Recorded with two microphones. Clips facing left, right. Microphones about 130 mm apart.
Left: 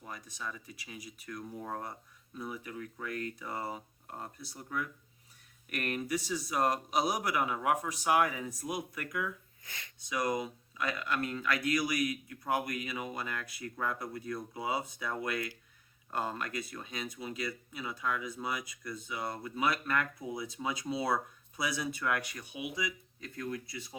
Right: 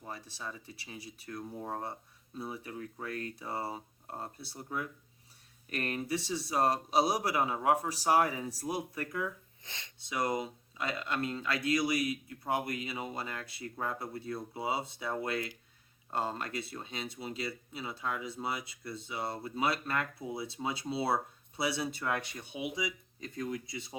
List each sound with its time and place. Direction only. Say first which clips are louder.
0.0 s a man's voice: even; 30° right (ahead or behind)